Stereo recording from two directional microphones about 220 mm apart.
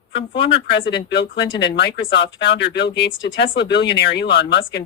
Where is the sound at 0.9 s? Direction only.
50° left (ahead or behind).